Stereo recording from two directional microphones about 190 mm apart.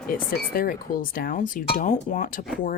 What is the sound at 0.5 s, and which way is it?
Speech, 50° left (ahead or behind).